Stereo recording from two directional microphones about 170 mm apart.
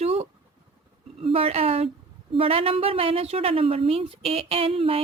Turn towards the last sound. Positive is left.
turn(degrees=-35)  # may be behind; listen again after turning